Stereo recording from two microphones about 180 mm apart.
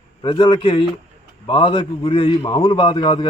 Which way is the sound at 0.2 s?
25° left (ahead or behind).